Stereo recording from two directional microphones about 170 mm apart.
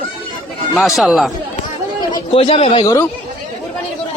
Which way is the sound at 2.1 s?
35° left (ahead or behind).